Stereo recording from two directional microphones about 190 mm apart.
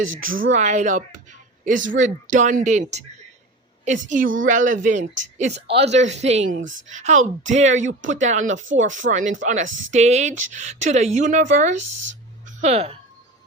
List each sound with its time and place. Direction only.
0.3 s speech: 90° right
0.5 s speech: 35° right (ahead or behind)
3.8 s speech: 40° right (ahead or behind)
6.6 s speech: 90° right
6.9 s speech: 40° right (ahead or behind)